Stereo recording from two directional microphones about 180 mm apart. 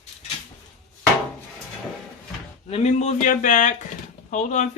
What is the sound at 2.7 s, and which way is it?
Speech, 40° left (ahead or behind).